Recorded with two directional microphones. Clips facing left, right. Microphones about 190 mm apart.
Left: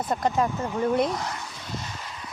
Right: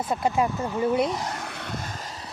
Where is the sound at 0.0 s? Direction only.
5° right (ahead or behind).